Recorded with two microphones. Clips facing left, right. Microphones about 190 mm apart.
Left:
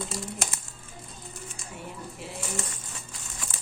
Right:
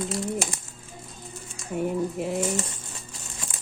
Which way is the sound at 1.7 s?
50° right (ahead or behind).